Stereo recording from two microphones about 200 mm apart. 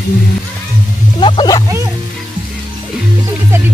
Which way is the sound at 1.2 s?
20° left (ahead or behind).